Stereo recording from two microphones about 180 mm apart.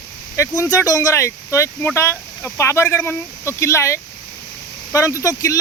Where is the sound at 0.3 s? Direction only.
15° left (ahead or behind).